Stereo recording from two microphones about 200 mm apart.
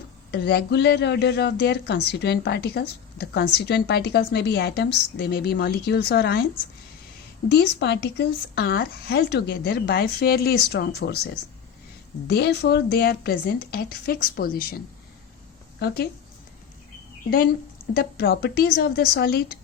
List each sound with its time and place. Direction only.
0.3 s speech: 55° left (ahead or behind)
7.4 s a woman's voice: 55° left (ahead or behind)
15.8 s a woman's voice: 55° left (ahead or behind)
17.9 s a woman's voice: 50° left (ahead or behind)